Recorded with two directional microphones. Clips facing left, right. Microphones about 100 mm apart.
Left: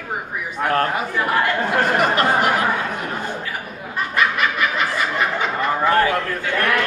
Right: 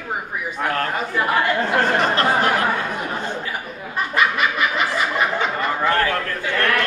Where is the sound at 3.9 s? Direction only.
Centre (ahead or behind).